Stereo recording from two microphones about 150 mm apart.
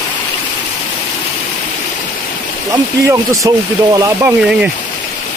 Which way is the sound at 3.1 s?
20° right (ahead or behind).